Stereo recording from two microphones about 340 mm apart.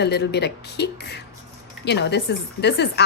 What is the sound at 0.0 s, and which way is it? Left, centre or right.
A woman's voice, left.